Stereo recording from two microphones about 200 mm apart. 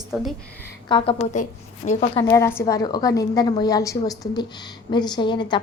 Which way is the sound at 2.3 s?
15° left (ahead or behind).